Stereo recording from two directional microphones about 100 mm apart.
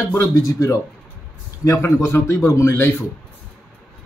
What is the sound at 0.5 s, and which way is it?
Speech, 30° left (ahead or behind).